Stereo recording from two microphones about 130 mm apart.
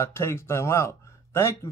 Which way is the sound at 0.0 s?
20° left (ahead or behind).